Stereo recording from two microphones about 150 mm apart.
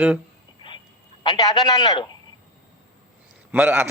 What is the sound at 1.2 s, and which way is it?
Speech, 25° left (ahead or behind).